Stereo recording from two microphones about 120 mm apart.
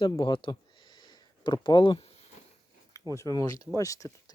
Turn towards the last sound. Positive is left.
turn(degrees=25)  # may be behind; listen again after turning